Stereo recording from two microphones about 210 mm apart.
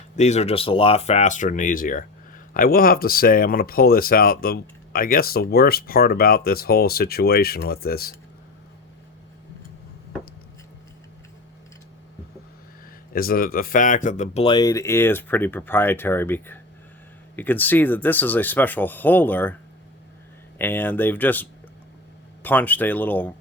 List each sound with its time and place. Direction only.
0.2 s speech: 30° left (ahead or behind)
13.1 s speech: 45° left (ahead or behind); by 19.5 s 10° left (ahead or behind)
20.6 s speech: 10° left (ahead or behind)
22.4 s speech: 10° left (ahead or behind)